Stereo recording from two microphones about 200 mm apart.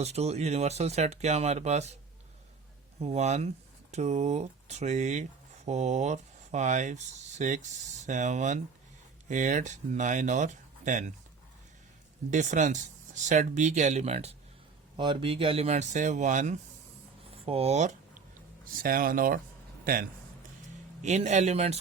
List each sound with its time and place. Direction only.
0.0 s speech: 30° right (ahead or behind)
3.0 s speech: 30° right (ahead or behind)
12.3 s speech: 35° right (ahead or behind)
18.3 s a man's voice: 45° right (ahead or behind)